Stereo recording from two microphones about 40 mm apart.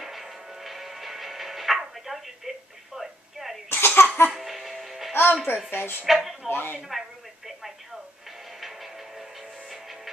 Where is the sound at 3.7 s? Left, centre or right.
Left.